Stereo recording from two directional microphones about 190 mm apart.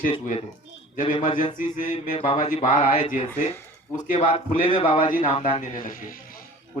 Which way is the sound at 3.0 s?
30° left (ahead or behind).